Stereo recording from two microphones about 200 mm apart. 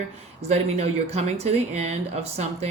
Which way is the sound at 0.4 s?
35° right (ahead or behind).